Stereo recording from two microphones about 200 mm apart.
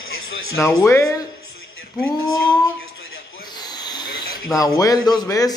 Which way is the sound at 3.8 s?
20° left (ahead or behind).